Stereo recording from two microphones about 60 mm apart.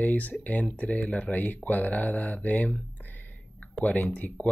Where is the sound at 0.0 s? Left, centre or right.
Left.